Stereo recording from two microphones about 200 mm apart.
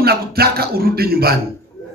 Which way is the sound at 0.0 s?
50° right (ahead or behind).